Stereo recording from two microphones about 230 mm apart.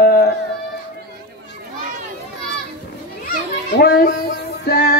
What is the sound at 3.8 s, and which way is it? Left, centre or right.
Child singing, left.